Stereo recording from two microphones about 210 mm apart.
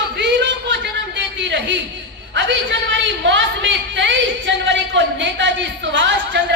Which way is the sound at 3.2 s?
60° right (ahead or behind).